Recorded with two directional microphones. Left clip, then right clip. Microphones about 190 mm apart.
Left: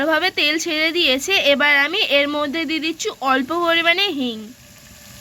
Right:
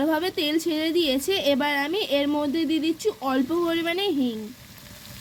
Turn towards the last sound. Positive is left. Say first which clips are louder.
# left 7 dB
turn(degrees=-10)  # may be behind; listen again after turning